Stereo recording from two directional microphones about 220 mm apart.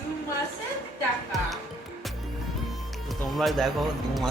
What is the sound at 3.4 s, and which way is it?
Speech, centre (ahead or behind).